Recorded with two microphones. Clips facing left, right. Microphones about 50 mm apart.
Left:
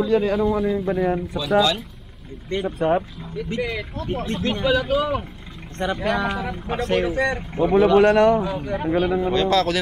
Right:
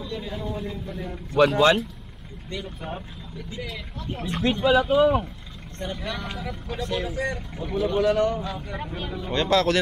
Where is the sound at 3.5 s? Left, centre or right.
Left.